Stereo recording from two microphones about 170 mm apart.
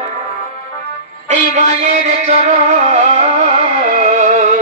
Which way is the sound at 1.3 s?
45° right (ahead or behind).